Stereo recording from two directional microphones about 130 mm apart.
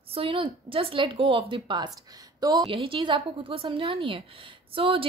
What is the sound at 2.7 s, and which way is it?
A woman's voice, 45° right (ahead or behind).